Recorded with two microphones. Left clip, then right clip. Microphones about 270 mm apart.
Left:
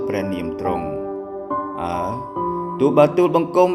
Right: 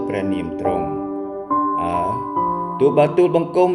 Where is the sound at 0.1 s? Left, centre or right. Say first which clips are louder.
Right 1 dB; left.